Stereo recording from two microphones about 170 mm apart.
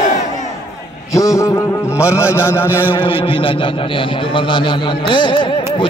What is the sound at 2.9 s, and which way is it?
A man's voice, 30° left (ahead or behind).